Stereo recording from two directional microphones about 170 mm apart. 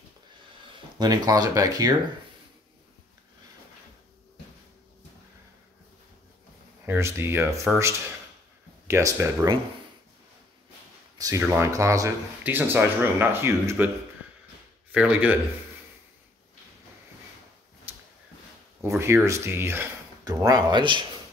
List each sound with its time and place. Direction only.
0.9 s speech: 25° right (ahead or behind)
6.9 s speech: 15° right (ahead or behind)
8.8 s speech: 15° right (ahead or behind)
11.1 s speech: 20° right (ahead or behind)
14.9 s speech: 10° right (ahead or behind)
17.9 s a sound: 10° right (ahead or behind)
18.8 s speech: 15° right (ahead or behind)